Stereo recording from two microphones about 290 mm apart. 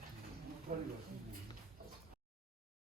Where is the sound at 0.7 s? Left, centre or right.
Right.